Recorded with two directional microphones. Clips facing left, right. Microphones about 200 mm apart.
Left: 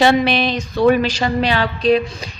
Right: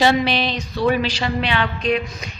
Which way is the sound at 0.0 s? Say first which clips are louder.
Left 3 dB; 55° left (ahead or behind).